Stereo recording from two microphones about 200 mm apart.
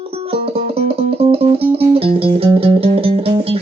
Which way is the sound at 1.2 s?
30° right (ahead or behind).